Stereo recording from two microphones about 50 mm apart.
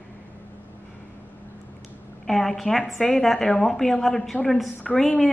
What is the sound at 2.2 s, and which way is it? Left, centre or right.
A woman's voice, centre.